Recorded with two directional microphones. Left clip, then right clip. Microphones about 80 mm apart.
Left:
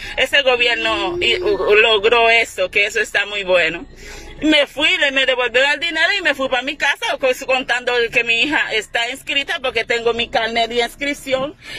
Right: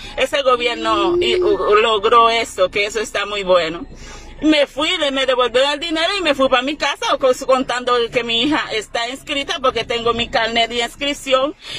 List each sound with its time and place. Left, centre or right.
0.1 s a man's voice: right
9.9 s speech: centre
10.6 s speech: centre
11.0 s speech: right